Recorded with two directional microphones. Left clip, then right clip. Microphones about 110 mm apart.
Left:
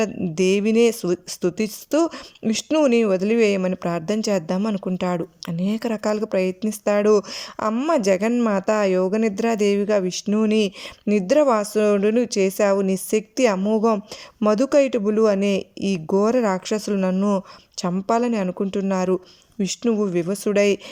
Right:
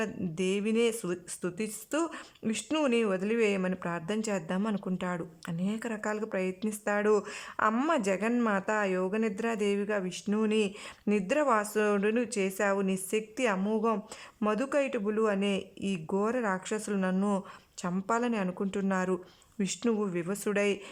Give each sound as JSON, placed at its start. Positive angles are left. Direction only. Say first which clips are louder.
{"t": 0.0, "sound": "speech", "louder": "left 12 dB", "side_deg": 40}